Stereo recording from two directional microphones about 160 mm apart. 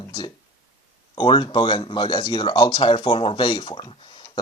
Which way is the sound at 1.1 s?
30° left (ahead or behind).